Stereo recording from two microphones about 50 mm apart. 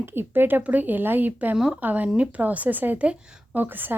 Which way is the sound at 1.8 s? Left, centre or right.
Right.